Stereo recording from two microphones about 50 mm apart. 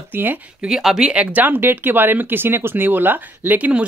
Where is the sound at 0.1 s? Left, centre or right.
Right.